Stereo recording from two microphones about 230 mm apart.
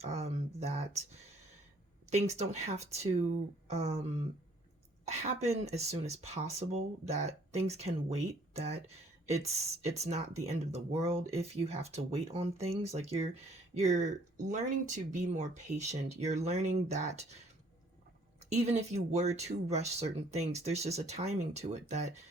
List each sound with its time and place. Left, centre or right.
0.0 s speech: right
2.0 s speech: right
10.0 s speech: right
18.4 s speech: right